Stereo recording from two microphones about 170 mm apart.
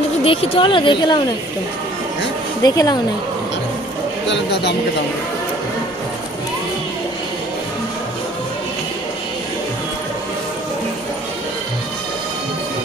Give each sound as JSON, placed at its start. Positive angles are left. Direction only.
{"t": 0.2, "sound": "speech", "side_deg": 35}
{"t": 2.6, "sound": "speech", "side_deg": 20}
{"t": 4.3, "sound": "speech", "side_deg": 85}